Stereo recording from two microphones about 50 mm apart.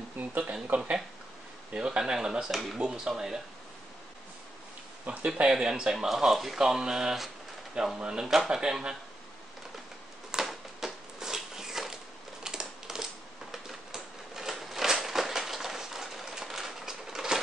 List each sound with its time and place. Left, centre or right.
0.2 s speech: right
1.7 s speech: centre
2.5 s speech: centre
2.8 s speech: centre
5.0 s speech: right
10.4 s a sound: centre
12.4 s crushing: centre
13.5 s typewriter: centre